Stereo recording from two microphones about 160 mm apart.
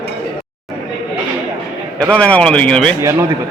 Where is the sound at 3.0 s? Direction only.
15° right (ahead or behind).